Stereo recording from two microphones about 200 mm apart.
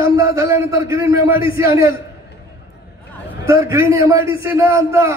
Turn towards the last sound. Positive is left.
turn(degrees=-15)  # may be behind; listen again after turning